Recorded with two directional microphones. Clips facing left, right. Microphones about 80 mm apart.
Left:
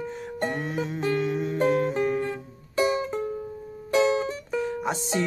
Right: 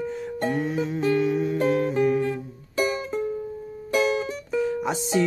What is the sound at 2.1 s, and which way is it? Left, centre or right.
Music, left.